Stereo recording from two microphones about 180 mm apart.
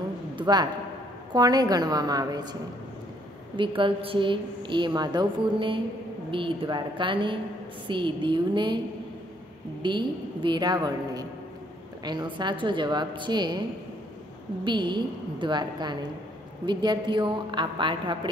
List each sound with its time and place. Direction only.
0.4 s a man's voice: 25° right (ahead or behind)
3.5 s a woman's voice: 30° right (ahead or behind)
9.8 s a woman's voice: 25° right (ahead or behind)
14.6 s a woman's voice: 25° right (ahead or behind)